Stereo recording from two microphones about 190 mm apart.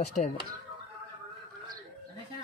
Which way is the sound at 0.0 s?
40° left (ahead or behind).